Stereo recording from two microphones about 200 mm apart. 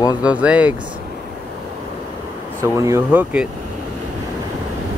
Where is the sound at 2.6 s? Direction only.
15° right (ahead or behind).